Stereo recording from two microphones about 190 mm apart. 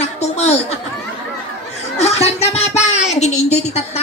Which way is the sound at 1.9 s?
35° left (ahead or behind).